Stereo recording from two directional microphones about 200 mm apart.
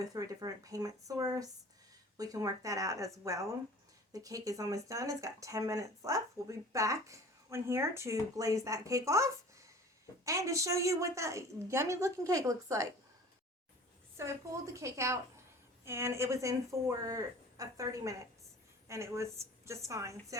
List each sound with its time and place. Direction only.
0.0 s speech: 15° right (ahead or behind)
14.2 s speech: 15° right (ahead or behind)